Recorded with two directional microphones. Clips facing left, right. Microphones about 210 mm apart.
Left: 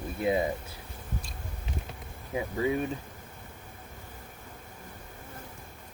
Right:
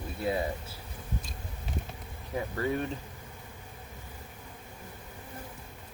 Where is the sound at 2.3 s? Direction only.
10° left (ahead or behind).